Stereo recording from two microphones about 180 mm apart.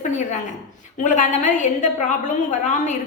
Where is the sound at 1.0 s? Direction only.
40° left (ahead or behind).